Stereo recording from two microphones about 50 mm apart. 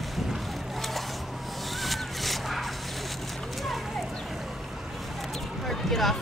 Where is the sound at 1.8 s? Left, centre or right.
Centre.